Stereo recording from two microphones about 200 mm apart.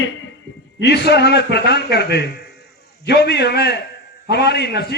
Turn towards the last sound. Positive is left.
turn(degrees=55)  # may be behind; listen again after turning